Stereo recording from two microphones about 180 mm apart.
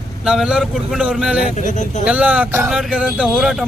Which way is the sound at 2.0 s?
5° right (ahead or behind).